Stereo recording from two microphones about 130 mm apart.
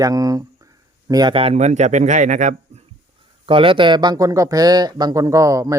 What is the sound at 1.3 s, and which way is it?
A man's voice, 55° right (ahead or behind).